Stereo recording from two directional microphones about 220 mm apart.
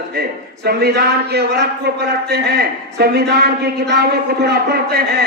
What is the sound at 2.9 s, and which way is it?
A man's voice, 45° right (ahead or behind).